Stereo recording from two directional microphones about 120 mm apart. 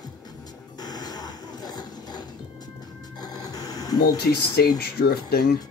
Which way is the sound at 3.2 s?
30° left (ahead or behind).